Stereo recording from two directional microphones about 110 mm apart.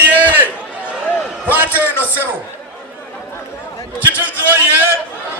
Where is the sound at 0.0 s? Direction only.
15° right (ahead or behind).